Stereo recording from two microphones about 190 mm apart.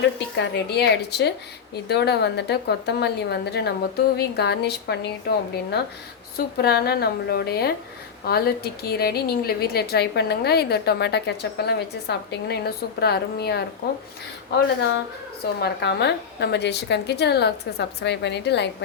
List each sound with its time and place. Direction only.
0.3 s a woman's voice: 65° left (ahead or behind)
15.6 s a woman's voice: 60° left (ahead or behind)